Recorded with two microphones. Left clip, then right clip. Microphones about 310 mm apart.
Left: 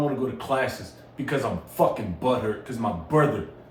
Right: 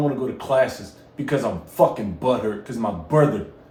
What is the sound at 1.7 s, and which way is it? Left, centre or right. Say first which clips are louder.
Speech: right 5 dB; right.